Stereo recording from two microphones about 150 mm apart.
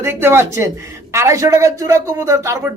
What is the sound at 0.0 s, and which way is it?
Speech, 15° right (ahead or behind).